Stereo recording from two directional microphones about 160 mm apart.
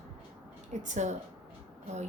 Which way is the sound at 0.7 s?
50° right (ahead or behind).